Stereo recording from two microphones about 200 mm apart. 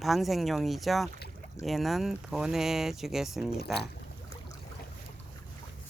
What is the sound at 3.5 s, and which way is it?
Speech, 55° left (ahead or behind).